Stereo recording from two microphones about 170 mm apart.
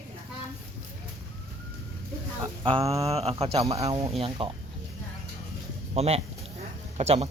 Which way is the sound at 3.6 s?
20° right (ahead or behind).